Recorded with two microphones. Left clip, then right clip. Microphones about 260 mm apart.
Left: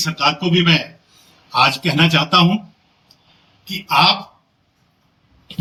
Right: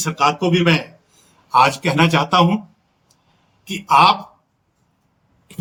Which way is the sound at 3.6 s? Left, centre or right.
Right.